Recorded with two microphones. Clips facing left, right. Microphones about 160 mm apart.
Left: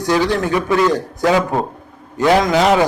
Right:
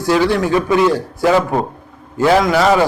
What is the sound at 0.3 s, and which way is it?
Speech, 20° right (ahead or behind).